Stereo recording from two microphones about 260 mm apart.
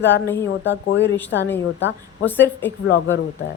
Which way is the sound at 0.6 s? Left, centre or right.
Left.